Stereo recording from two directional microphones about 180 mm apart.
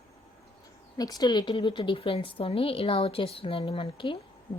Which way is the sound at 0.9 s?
20° left (ahead or behind).